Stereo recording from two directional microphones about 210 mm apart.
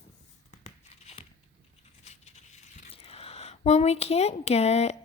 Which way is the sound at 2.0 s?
30° left (ahead or behind).